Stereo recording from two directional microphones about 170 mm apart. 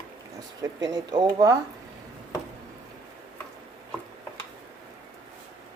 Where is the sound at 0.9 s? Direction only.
25° right (ahead or behind).